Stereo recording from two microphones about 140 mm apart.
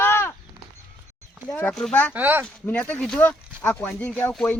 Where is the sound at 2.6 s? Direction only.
10° left (ahead or behind).